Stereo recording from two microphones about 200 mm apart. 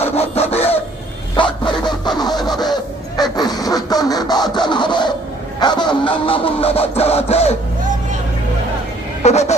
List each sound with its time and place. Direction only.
0.0 s rub: 30° left (ahead or behind)
1.3 s dog: 25° left (ahead or behind)
2.6 s a sound: 20° left (ahead or behind)
9.2 s speech: 35° left (ahead or behind)